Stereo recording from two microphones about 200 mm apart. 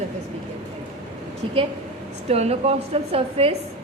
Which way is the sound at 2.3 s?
30° right (ahead or behind).